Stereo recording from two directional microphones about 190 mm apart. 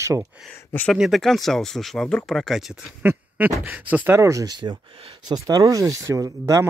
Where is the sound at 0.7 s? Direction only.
10° left (ahead or behind).